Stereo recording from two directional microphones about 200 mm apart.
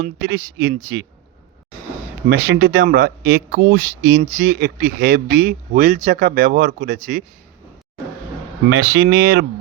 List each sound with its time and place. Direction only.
0.0 s speech: 50° right (ahead or behind)
2.5 s speech: 75° right (ahead or behind)
2.7 s speech: 45° right (ahead or behind)
8.8 s speech: 50° right (ahead or behind)